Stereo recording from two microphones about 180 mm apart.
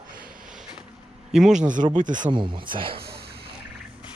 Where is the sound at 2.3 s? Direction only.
25° right (ahead or behind).